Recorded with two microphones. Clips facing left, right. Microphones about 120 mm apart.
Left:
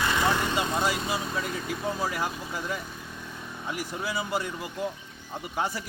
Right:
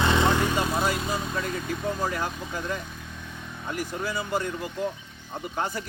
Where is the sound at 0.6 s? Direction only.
5° right (ahead or behind).